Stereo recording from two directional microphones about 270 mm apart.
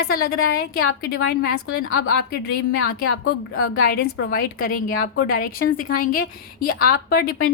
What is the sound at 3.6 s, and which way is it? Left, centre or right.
A woman's voice, left.